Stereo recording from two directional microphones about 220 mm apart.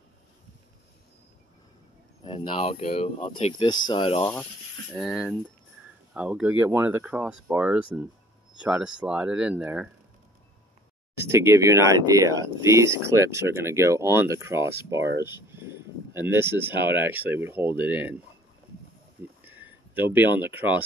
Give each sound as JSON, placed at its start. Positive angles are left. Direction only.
{"t": 2.2, "sound": "speech", "side_deg": 25}
{"t": 4.9, "sound": "speech", "side_deg": -5}
{"t": 11.2, "sound": "speech", "side_deg": -10}
{"t": 19.4, "sound": "a sound", "side_deg": -10}
{"t": 20.1, "sound": "speech", "side_deg": -10}